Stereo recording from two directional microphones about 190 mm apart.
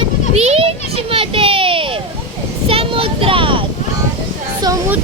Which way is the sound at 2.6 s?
30° right (ahead or behind).